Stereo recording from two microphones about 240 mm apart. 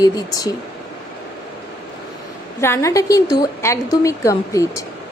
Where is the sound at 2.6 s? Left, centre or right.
Centre.